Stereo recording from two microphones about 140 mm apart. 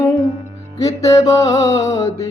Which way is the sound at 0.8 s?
25° left (ahead or behind).